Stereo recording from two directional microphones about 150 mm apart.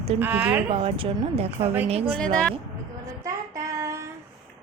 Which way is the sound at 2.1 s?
5° left (ahead or behind).